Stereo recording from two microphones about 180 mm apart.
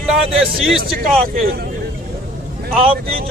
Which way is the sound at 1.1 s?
55° right (ahead or behind).